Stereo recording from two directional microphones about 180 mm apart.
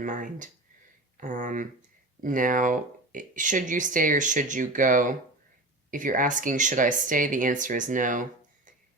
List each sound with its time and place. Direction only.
0.0 s speech: 45° right (ahead or behind)